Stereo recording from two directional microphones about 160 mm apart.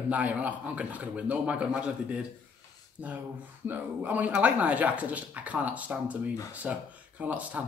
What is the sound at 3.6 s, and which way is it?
Speech, 10° right (ahead or behind).